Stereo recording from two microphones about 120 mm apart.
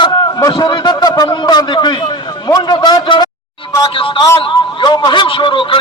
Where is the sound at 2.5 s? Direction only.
40° left (ahead or behind).